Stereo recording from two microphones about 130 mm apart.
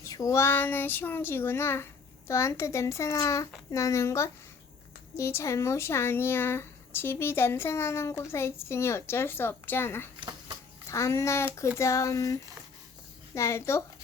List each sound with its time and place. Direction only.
0.0 s speech: 25° left (ahead or behind)
10.2 s a sound: 40° right (ahead or behind)
10.8 s speech: 20° left (ahead or behind)